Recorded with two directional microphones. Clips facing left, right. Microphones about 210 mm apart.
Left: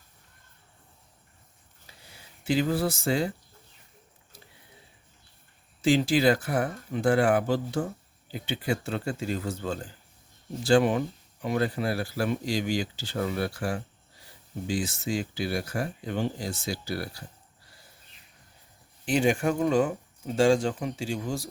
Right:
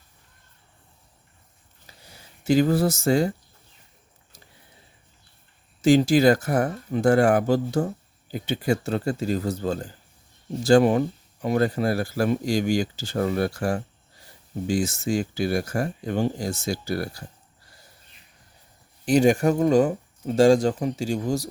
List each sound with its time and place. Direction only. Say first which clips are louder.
2.0 s speech: right 6 dB; 40° right (ahead or behind)
5.8 s speech: right 5 dB; 45° right (ahead or behind)
19.0 s speech: right 6 dB; 40° right (ahead or behind)